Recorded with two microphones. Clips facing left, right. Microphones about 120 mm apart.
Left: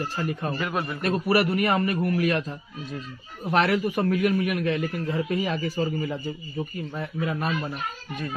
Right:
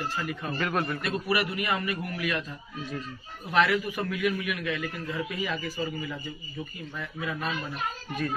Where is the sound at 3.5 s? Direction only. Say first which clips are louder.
Left 3 dB; 45° left (ahead or behind).